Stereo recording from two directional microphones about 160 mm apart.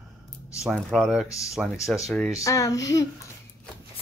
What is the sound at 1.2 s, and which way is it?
Speech, 20° left (ahead or behind).